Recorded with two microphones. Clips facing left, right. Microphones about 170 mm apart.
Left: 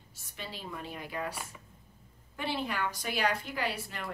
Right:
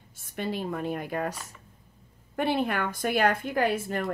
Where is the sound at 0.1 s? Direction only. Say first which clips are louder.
Right 12 dB; 55° right (ahead or behind).